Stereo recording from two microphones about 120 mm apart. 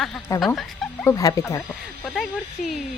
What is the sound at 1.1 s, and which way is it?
Speech, 25° left (ahead or behind).